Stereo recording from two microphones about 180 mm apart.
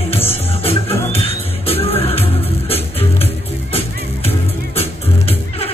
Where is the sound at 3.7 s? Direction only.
35° left (ahead or behind).